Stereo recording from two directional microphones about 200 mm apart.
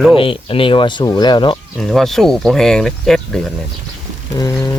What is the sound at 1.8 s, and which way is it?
Speech, centre (ahead or behind).